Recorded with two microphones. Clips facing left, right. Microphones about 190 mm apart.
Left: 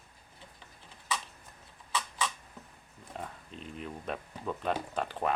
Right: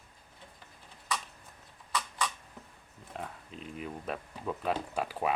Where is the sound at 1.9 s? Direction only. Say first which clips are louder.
Even; 5° left (ahead or behind).